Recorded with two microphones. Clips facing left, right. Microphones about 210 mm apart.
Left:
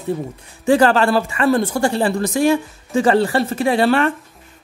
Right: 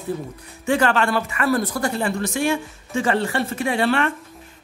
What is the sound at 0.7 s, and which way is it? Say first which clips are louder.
Speech: left 6 dB; 35° left (ahead or behind).